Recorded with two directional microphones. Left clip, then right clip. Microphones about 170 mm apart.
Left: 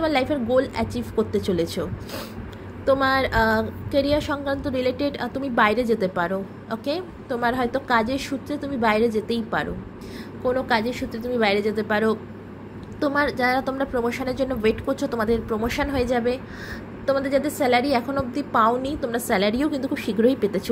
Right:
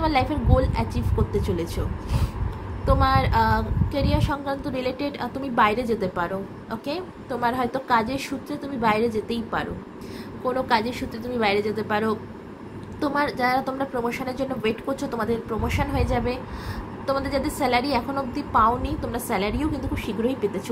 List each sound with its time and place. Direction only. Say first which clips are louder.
0.0 s a woman's voice: left 1 dB; 20° left (ahead or behind)